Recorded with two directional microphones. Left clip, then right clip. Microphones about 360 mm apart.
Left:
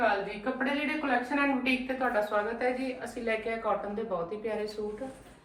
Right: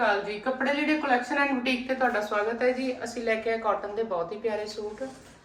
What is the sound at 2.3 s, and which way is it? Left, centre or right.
Speech, right.